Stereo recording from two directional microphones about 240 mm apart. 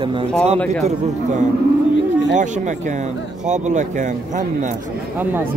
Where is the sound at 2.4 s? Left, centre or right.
Right.